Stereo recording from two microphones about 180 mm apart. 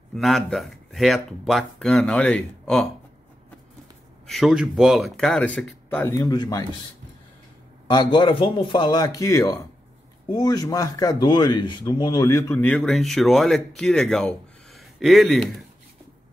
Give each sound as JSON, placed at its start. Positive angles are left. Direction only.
{"t": 0.1, "sound": "speech", "side_deg": 0}
{"t": 4.3, "sound": "speech", "side_deg": 0}
{"t": 7.9, "sound": "a man's voice", "side_deg": 25}